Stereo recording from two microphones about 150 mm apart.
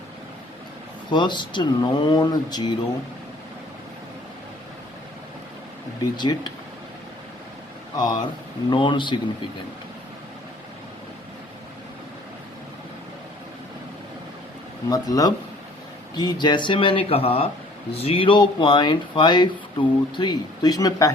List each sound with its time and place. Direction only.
1.1 s speech: 30° left (ahead or behind)
6.0 s speech: 30° left (ahead or behind)
7.9 s speech: 30° left (ahead or behind)
14.8 s speech: 25° left (ahead or behind)